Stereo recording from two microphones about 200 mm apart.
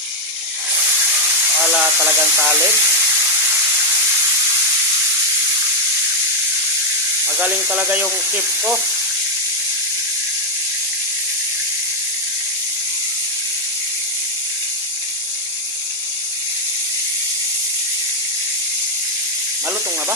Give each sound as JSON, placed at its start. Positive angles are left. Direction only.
{"t": 1.7, "sound": "speech", "side_deg": -10}
{"t": 7.3, "sound": "speech", "side_deg": -5}